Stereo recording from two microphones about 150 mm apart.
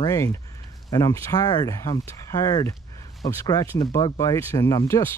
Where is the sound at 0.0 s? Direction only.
20° left (ahead or behind).